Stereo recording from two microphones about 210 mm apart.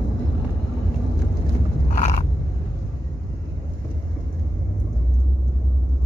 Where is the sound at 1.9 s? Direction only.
35° left (ahead or behind).